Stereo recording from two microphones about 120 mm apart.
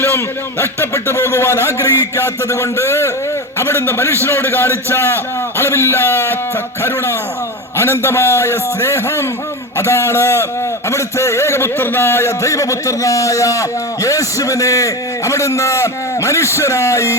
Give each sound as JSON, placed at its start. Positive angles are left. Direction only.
{"t": 0.6, "sound": "a man's voice", "side_deg": 20}